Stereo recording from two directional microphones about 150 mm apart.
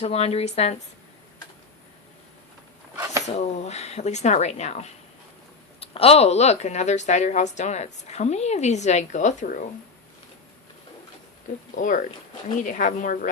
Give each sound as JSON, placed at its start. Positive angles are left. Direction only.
{"t": 0.0, "sound": "a woman's voice", "side_deg": 40}
{"t": 3.2, "sound": "a woman's voice", "side_deg": 45}
{"t": 11.7, "sound": "a woman's voice", "side_deg": 60}